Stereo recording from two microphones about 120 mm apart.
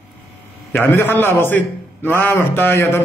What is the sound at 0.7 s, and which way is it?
A man's voice, 15° left (ahead or behind).